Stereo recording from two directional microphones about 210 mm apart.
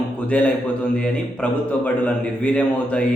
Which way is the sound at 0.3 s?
5° left (ahead or behind).